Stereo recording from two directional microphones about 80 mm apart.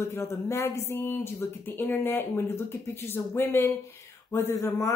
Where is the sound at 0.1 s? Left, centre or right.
Left.